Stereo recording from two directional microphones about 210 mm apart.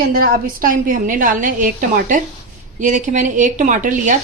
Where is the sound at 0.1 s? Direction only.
45° right (ahead or behind).